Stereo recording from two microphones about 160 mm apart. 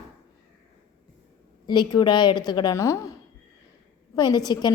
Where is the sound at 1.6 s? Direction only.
25° left (ahead or behind).